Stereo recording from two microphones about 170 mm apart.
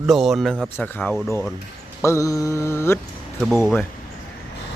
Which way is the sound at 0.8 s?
10° left (ahead or behind).